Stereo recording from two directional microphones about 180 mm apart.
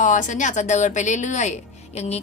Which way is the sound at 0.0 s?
45° left (ahead or behind).